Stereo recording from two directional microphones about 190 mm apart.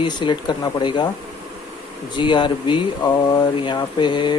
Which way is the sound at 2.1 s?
25° left (ahead or behind).